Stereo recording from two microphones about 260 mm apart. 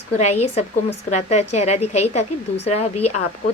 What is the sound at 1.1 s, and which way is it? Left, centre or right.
Speech, left.